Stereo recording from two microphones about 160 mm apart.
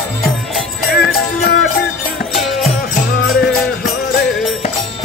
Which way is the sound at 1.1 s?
85° left.